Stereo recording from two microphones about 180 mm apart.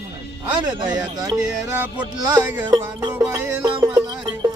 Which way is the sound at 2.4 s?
10° right (ahead or behind).